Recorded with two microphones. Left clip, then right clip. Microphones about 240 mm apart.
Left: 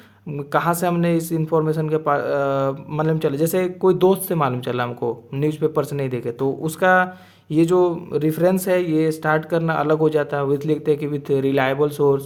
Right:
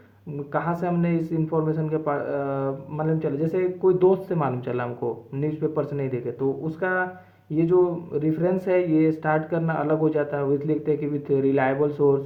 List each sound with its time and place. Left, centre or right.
0.5 s a man's voice: left